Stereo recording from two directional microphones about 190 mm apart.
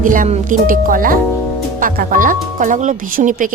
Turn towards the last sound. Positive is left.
turn(degrees=-45)  # may be behind; listen again after turning